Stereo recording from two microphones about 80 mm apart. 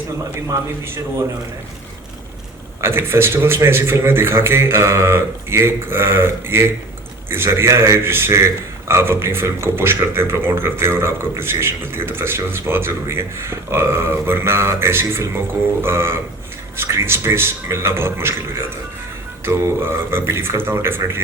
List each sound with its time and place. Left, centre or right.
2.8 s speech: right